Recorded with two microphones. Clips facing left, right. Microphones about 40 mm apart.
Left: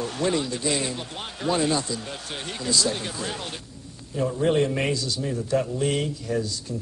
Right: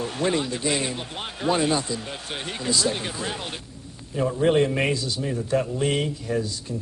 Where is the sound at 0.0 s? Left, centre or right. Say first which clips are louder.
Right 1 dB; centre.